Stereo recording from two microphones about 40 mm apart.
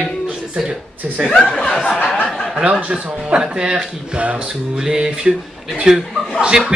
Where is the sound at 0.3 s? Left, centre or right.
Right.